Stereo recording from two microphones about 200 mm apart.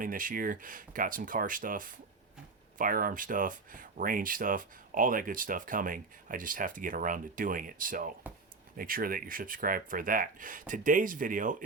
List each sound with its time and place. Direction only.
0.0 s speech: 45° right (ahead or behind)